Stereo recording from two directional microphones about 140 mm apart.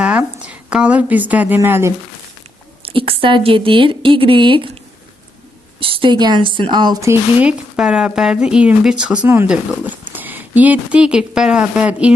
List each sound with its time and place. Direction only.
0.0 s a woman's voice: 10° right (ahead or behind)
2.8 s a woman's voice: 40° right (ahead or behind)
5.8 s a woman's voice: 40° right (ahead or behind); by 12.1 s 10° right (ahead or behind)